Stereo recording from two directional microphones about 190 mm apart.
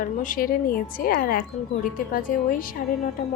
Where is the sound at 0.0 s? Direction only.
45° left (ahead or behind).